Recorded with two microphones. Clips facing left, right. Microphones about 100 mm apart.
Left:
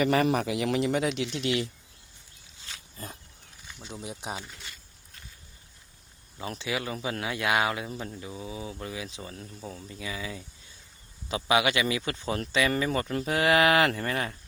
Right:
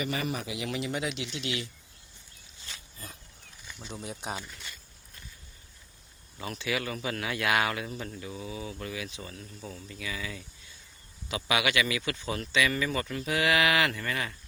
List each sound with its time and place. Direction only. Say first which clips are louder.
0.0 s speech: left 9 dB; 70° left (ahead or behind); by 1.7 s 40° left (ahead or behind)
4.0 s speech: even; 10° left (ahead or behind)
6.4 s speech: even; 30° left (ahead or behind)